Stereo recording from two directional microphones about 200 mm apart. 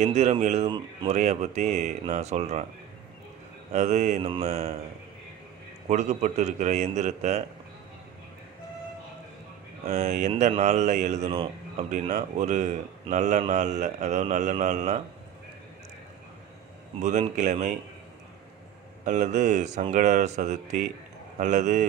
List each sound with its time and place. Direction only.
0.0 s speech: 35° right (ahead or behind)
3.7 s speech: 35° right (ahead or behind)
5.9 s speech: 35° right (ahead or behind)
9.8 s speech: 35° right (ahead or behind)
17.0 s speech: 40° right (ahead or behind)
19.0 s speech: 35° right (ahead or behind)